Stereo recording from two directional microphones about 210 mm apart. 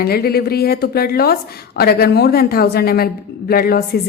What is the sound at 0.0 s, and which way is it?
A woman's voice, 50° left (ahead or behind).